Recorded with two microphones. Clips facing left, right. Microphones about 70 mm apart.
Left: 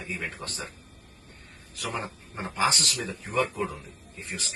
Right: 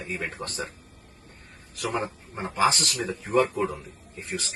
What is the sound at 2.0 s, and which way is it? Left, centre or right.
Speech, centre.